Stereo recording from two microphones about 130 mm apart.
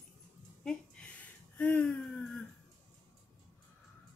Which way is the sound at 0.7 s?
10° left (ahead or behind).